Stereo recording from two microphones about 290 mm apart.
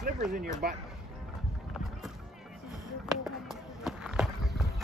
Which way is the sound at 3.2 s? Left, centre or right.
Centre.